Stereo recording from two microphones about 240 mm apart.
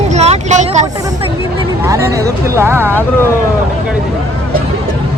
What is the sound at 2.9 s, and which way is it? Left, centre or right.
Speech, centre.